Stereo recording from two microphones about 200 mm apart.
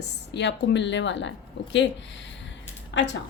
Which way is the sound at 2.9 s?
65° left (ahead or behind).